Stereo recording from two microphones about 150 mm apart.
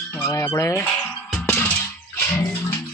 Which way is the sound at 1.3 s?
15° left (ahead or behind).